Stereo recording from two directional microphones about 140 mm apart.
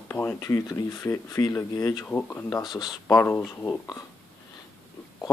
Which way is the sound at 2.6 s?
30° left (ahead or behind).